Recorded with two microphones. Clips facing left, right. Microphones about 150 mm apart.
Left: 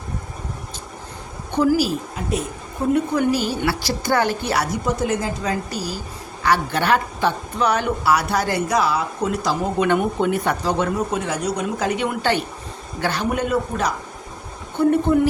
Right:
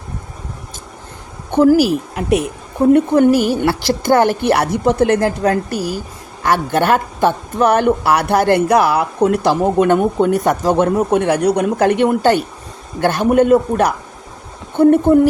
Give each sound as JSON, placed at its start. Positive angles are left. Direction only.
{"t": 1.5, "sound": "a woman's voice", "side_deg": -60}
{"t": 2.9, "sound": "a woman's voice", "side_deg": -55}